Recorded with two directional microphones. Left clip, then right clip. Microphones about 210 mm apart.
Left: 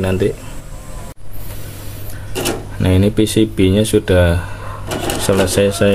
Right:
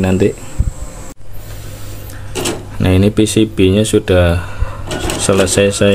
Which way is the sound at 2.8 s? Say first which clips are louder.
Right 2 dB; 10° right (ahead or behind).